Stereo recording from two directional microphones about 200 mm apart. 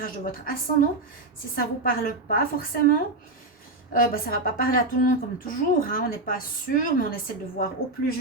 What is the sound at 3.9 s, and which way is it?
Speech, 45° left (ahead or behind).